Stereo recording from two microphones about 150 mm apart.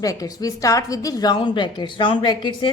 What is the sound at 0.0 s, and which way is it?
A woman's voice, 25° left (ahead or behind).